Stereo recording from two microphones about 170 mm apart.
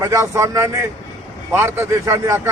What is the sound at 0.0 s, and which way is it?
A man's voice, 15° right (ahead or behind).